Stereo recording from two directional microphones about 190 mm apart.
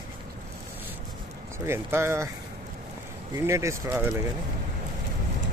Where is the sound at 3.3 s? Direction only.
15° right (ahead or behind).